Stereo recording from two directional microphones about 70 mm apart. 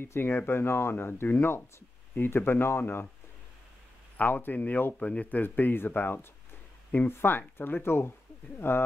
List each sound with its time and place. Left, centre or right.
0.0 s speech: left
4.2 s speech: left